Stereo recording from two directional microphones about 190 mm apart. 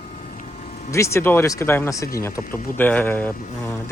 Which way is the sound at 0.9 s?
15° left (ahead or behind).